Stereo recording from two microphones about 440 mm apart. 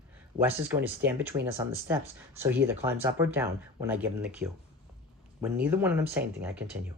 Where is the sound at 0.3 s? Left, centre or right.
Centre.